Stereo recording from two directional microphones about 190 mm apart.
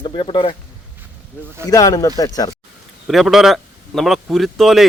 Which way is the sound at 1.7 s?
20° left (ahead or behind).